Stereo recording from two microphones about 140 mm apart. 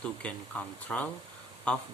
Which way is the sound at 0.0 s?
10° left (ahead or behind).